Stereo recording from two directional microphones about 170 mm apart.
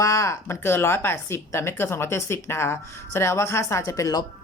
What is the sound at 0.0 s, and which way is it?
Speech, 20° left (ahead or behind).